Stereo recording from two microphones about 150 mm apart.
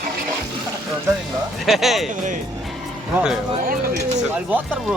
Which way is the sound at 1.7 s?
Centre (ahead or behind).